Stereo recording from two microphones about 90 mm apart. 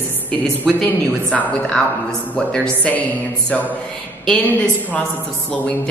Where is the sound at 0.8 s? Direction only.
15° left (ahead or behind).